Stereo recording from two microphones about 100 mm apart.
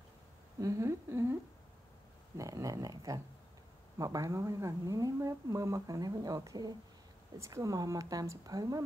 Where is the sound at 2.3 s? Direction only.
35° right (ahead or behind).